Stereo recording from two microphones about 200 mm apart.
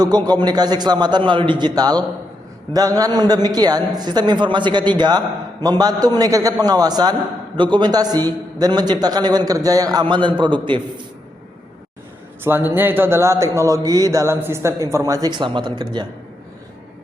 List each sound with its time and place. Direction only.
0.0 s a man's voice: 20° right (ahead or behind)
12.5 s speech: 10° right (ahead or behind)